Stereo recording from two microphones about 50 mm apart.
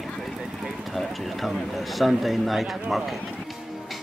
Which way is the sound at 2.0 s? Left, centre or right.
Centre.